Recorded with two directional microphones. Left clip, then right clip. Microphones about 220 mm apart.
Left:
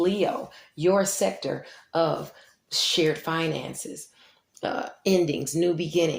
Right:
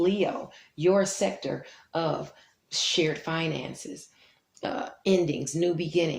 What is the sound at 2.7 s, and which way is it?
Speech, 40° left (ahead or behind).